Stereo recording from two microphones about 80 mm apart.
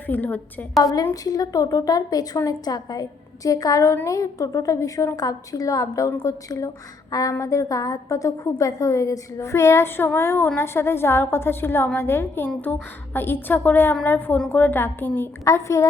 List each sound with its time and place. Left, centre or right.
0.1 s a woman's voice: left
0.8 s a woman's voice: left
15.4 s a woman's voice: left